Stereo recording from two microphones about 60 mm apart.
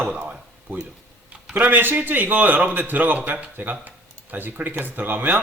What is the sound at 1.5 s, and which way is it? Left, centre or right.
A man's voice, right.